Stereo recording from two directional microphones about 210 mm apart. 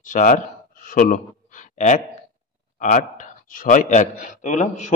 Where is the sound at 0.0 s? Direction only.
40° left (ahead or behind).